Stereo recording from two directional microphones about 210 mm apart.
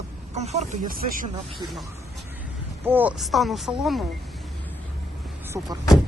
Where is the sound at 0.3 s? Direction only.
35° right (ahead or behind).